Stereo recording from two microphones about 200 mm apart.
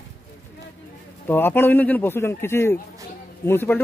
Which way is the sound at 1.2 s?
10° left (ahead or behind).